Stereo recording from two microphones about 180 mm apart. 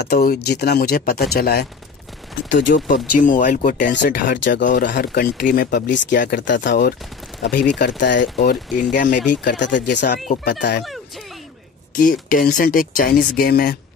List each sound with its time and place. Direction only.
0.0 s speech: 55° left (ahead or behind)
2.5 s speech: 80° left
2.9 s speech: 45° left (ahead or behind)
3.8 s speech: 75° left (ahead or behind)
4.9 s speech: 60° left (ahead or behind)
6.4 s speech: 80° left; by 9.2 s 45° left (ahead or behind)
9.4 s speech: 75° left (ahead or behind)
9.9 s speech: 70° left (ahead or behind)
11.9 s speech: 50° left (ahead or behind)